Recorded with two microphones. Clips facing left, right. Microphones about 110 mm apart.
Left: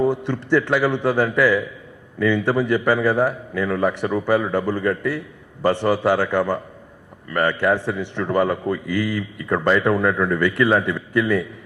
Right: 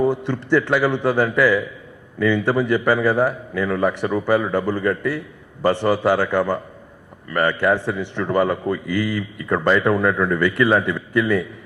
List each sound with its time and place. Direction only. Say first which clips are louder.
0.0 s a man's voice: right 1 dB; 30° right (ahead or behind)